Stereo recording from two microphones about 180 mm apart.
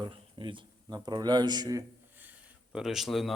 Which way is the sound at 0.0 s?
25° right (ahead or behind).